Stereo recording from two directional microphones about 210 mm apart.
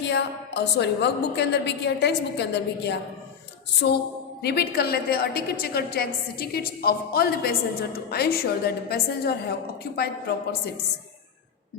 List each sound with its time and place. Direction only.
0.0 s a woman's voice: 55° left (ahead or behind)
4.4 s a woman's voice: 45° left (ahead or behind)